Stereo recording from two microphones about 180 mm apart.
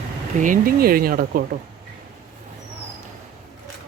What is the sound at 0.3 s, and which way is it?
Speech, 45° right (ahead or behind).